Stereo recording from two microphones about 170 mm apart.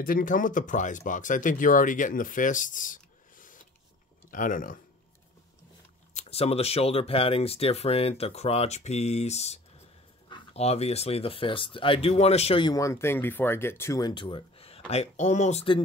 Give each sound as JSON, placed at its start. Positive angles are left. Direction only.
{"t": 0.0, "sound": "speech", "side_deg": 55}
{"t": 6.1, "sound": "speech", "side_deg": 35}